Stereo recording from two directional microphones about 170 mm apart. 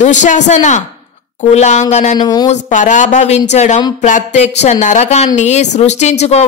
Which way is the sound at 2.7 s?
45° left (ahead or behind).